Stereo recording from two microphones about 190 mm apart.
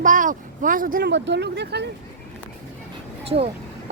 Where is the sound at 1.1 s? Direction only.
65° right (ahead or behind).